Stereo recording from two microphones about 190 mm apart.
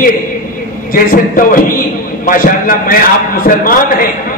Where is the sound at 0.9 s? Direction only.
50° left (ahead or behind).